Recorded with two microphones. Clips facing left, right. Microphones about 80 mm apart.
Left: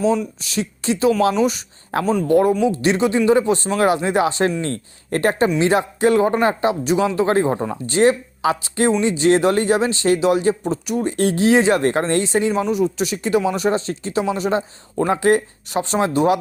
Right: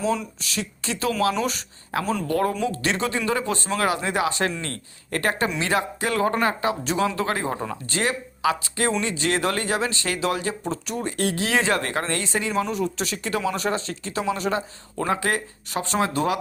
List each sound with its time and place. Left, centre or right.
0.3 s speech: left
11.2 s speech: left
12.6 s speech: centre